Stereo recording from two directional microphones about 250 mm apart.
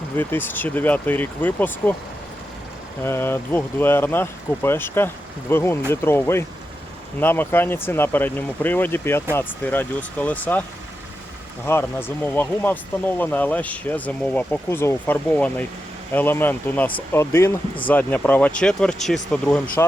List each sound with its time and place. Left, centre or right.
0.2 s speech: centre
3.0 s speech: centre
11.6 s speech: centre